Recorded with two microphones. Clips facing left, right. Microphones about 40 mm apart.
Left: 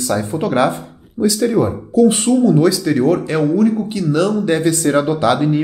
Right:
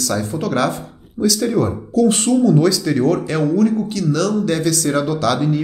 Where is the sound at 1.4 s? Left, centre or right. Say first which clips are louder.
Left 3 dB; centre.